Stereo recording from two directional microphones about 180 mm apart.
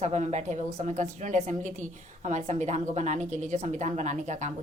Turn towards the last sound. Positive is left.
turn(degrees=-40)  # may be behind; listen again after turning